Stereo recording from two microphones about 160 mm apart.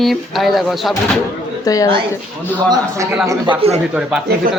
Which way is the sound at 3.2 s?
20° right (ahead or behind).